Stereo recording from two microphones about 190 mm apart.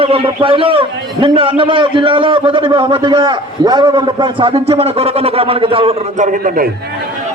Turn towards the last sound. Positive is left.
turn(degrees=-45)  # may be behind; listen again after turning